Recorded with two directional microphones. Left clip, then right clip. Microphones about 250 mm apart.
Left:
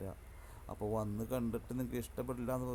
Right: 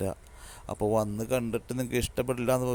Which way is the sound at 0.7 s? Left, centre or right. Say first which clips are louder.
Right 12 dB; right.